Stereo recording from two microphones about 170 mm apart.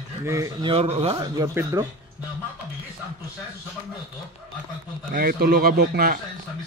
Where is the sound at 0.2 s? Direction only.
20° right (ahead or behind).